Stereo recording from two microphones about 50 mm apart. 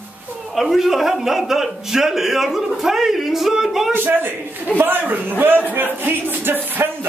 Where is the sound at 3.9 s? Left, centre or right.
Right.